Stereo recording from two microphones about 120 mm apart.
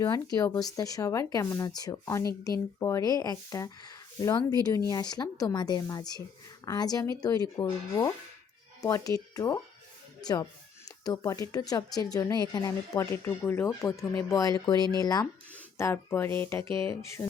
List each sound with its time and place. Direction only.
0.5 s a woman's voice: 30° left (ahead or behind)
10.8 s a woman's voice: 30° left (ahead or behind)
15.8 s speech: 20° left (ahead or behind)